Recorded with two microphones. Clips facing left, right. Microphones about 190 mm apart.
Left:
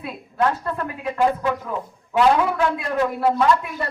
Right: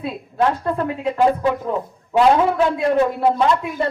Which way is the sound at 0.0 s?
30° right (ahead or behind).